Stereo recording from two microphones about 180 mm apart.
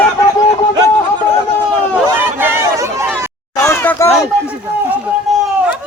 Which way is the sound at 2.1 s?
10° right (ahead or behind).